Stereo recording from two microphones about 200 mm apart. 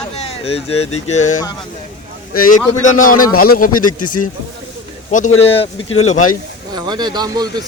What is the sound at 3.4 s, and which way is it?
Speech, 45° left (ahead or behind).